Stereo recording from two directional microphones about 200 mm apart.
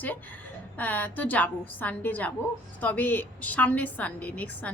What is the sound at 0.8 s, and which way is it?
A woman's voice, 10° left (ahead or behind).